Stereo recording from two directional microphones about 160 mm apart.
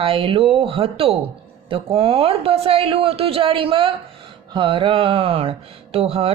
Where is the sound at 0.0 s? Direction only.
35° right (ahead or behind).